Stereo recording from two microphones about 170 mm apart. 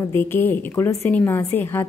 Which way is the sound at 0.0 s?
15° left (ahead or behind).